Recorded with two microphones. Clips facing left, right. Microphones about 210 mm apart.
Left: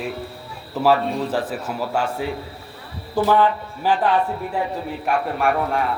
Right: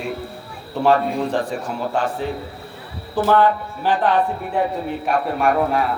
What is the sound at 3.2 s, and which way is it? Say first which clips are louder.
Speech: even; 10° left (ahead or behind).